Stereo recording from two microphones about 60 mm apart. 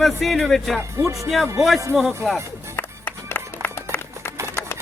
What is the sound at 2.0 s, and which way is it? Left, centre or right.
Speech, centre.